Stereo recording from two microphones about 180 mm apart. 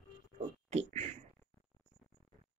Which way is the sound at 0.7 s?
40° right (ahead or behind).